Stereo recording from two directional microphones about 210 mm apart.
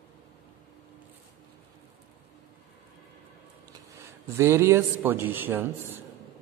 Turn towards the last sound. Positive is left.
turn(degrees=-10)  # may be behind; listen again after turning